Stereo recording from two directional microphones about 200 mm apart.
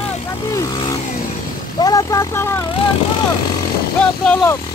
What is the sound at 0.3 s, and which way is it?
Vehicle, 15° left (ahead or behind).